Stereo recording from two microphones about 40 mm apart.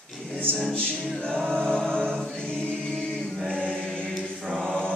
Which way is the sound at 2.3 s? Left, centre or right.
Left.